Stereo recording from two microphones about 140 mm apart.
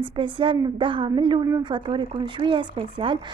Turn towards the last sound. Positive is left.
turn(degrees=-40)  # may be behind; listen again after turning